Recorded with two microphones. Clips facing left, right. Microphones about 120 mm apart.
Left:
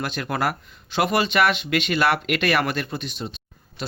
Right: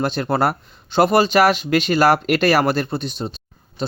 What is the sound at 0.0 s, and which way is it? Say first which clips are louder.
Speech: right 6 dB; 35° right (ahead or behind).